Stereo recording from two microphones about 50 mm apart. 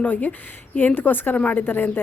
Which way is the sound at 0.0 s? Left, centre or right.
Left.